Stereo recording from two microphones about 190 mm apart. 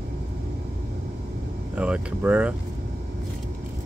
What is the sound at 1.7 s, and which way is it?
Speech, 5° right (ahead or behind).